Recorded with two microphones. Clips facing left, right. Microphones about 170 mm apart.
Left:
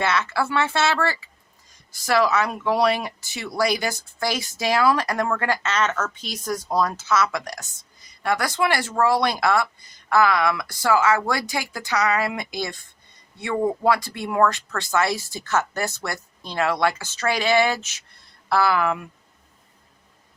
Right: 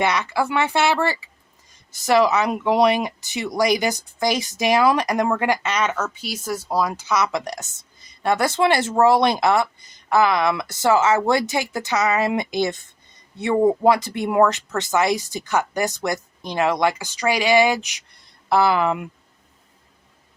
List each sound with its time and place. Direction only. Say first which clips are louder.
0.0 s speech: right 2 dB; 15° right (ahead or behind)